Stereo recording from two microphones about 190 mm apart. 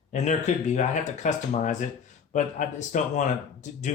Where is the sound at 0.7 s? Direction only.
40° left (ahead or behind).